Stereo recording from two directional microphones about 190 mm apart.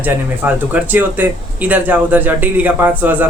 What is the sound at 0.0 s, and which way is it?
Speech, 10° right (ahead or behind).